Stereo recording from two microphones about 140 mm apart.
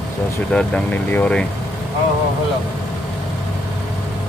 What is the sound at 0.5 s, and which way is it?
Speech, 5° left (ahead or behind).